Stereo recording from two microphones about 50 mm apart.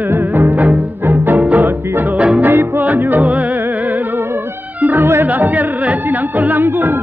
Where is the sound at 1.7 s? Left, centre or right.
Right.